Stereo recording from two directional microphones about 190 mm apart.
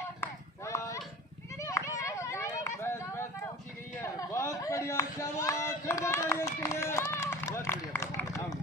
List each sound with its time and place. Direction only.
0.2 s run: 15° left (ahead or behind)
1.6 s a sound: 15° left (ahead or behind)
4.0 s chatter: 15° left (ahead or behind)
7.0 s run: 15° left (ahead or behind)